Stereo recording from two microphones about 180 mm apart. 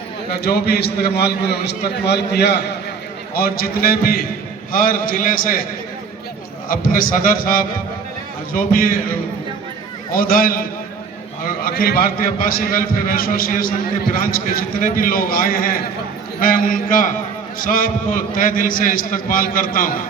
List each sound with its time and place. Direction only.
0.4 s a man's voice: 65° left (ahead or behind)
3.3 s a man's voice: 55° left (ahead or behind)
6.7 s a man's voice: 55° left (ahead or behind)
10.2 s a man's voice: 55° left (ahead or behind)